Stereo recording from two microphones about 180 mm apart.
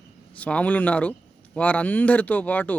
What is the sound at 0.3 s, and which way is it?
Speech, 10° left (ahead or behind).